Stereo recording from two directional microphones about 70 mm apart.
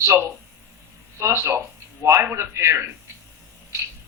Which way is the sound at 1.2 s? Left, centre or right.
Right.